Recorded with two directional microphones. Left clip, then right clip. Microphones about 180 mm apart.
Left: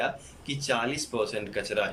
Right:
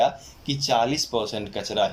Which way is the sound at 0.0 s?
30° right (ahead or behind).